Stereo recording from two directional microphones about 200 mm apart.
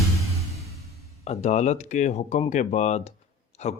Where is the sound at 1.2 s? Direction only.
35° left (ahead or behind).